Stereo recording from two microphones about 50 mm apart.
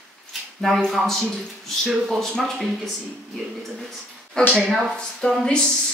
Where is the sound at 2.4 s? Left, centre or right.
Centre.